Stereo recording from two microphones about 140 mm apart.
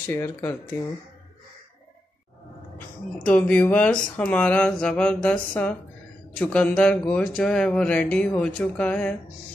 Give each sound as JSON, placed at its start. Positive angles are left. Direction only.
{"t": 0.1, "sound": "speech", "side_deg": 15}
{"t": 3.3, "sound": "speech", "side_deg": 10}